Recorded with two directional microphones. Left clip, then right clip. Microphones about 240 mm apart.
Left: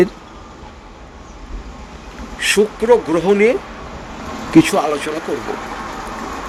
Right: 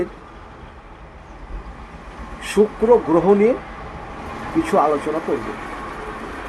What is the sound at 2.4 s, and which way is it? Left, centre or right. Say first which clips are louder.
Speech: left 3 dB; left.